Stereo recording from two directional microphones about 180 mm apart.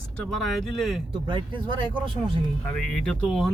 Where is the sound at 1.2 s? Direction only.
25° right (ahead or behind).